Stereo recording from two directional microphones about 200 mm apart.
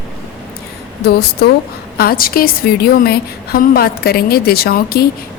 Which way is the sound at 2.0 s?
50° left (ahead or behind).